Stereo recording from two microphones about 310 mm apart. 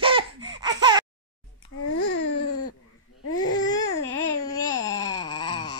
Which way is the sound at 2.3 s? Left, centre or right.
Left.